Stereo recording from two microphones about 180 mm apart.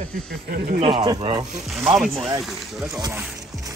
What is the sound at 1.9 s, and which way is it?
Speech, centre (ahead or behind).